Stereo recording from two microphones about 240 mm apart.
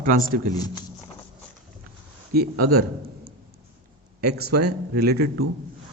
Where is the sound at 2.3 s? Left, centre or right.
Right.